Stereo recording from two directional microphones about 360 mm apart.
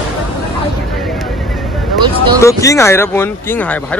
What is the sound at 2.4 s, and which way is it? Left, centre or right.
Speech, centre.